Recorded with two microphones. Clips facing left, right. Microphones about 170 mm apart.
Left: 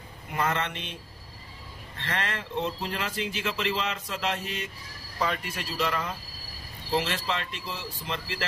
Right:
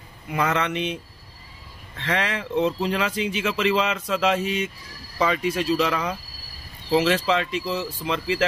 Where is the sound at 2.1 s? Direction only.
85° right.